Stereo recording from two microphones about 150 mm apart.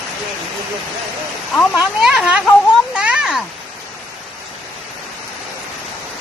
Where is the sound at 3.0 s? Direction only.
5° right (ahead or behind).